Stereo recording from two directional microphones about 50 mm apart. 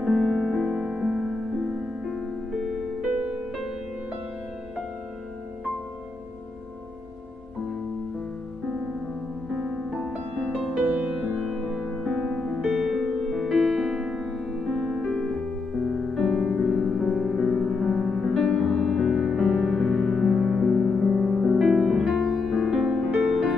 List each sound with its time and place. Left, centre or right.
0.0 s music: centre
0.6 s music: centre
3.2 s music: right
9.5 s music: centre
10.8 s music: right
11.3 s music: centre
13.2 s music: centre
13.8 s piano: centre
15.8 s music: centre
19.9 s music: centre
20.2 s music: centre
21.2 s music: centre